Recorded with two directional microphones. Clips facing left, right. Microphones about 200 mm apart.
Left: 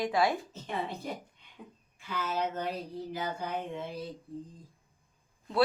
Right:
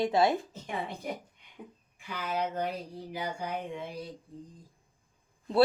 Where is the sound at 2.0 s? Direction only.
15° right (ahead or behind).